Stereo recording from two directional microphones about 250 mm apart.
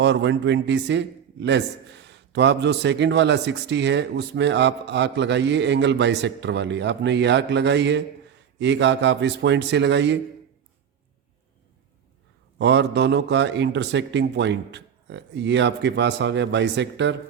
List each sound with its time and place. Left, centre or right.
0.0 s a man's voice: right
12.5 s a man's voice: right